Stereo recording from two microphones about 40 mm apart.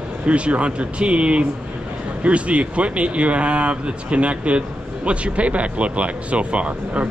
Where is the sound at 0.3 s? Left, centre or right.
Right.